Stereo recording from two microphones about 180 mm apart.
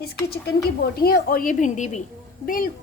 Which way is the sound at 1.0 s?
55° left (ahead or behind).